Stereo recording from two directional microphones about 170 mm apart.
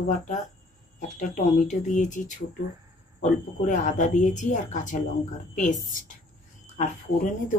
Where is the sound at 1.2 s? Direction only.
45° left (ahead or behind).